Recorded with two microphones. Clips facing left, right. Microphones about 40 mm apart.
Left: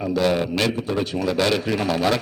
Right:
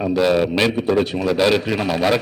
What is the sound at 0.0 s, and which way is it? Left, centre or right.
A man's voice, centre.